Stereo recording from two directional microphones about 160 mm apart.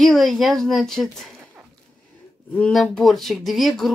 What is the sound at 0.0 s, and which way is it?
Speech, centre (ahead or behind).